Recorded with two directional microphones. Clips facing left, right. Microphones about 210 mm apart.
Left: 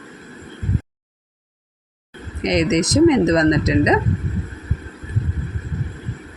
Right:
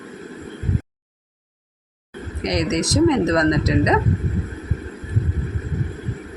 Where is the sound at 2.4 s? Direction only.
20° left (ahead or behind).